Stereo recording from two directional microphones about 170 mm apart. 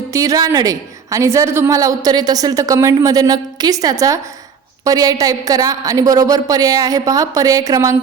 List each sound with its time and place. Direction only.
0.1 s a woman's voice: 20° right (ahead or behind)